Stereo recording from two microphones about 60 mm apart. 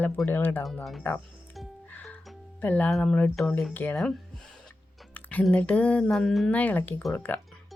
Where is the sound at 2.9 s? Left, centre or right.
Centre.